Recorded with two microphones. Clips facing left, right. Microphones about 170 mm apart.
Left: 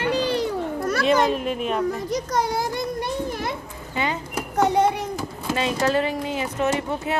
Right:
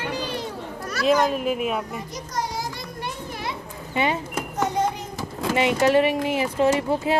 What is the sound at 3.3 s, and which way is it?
Children playing, 45° left (ahead or behind).